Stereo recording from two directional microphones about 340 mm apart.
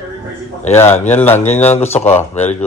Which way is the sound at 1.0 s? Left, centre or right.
Centre.